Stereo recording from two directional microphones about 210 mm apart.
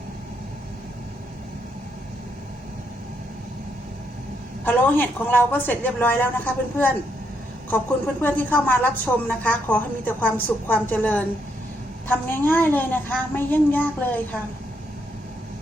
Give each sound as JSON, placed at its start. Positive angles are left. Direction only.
{"t": 4.6, "sound": "a woman's voice", "side_deg": 10}
{"t": 12.3, "sound": "a woman's voice", "side_deg": 10}